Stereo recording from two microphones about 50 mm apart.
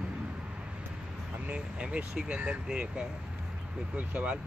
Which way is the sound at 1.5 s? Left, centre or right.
Centre.